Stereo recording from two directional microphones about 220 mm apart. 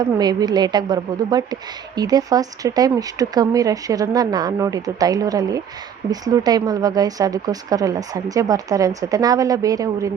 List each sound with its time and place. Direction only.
0.0 s speech: 20° right (ahead or behind)